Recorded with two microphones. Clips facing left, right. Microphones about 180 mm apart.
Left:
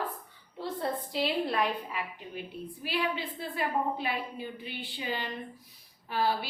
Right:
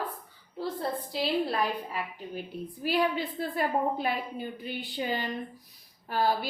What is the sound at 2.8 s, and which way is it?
A woman's voice, 40° right (ahead or behind).